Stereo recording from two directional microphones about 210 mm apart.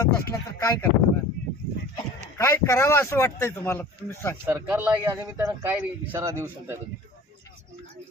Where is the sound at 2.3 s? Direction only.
10° left (ahead or behind).